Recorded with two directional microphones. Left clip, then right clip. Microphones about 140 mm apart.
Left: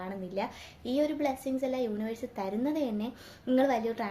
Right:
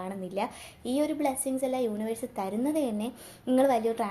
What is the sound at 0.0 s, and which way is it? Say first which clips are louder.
A woman's voice: right 2 dB; 20° right (ahead or behind).